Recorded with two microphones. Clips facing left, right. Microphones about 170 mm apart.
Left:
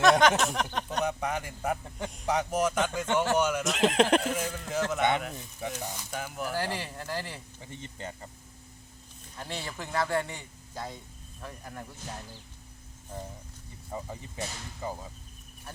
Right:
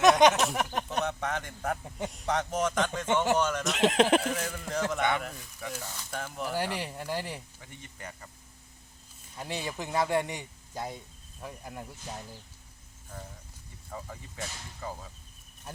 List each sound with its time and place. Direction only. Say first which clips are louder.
0.0 s a sound: right 1 dB; 20° right (ahead or behind)
0.3 s speech: even; 5° right (ahead or behind)
1.0 s speech: left 2 dB; 10° left (ahead or behind)
5.4 s speech: left 3 dB; 20° left (ahead or behind); by 6.6 s 5° left (ahead or behind)
6.6 s speech: right 1 dB; 15° right (ahead or behind)
7.6 s speech: left 5 dB; 25° left (ahead or behind)
9.4 s speech: right 2 dB; 15° right (ahead or behind)
13.9 s speech: left 4 dB; 15° left (ahead or behind)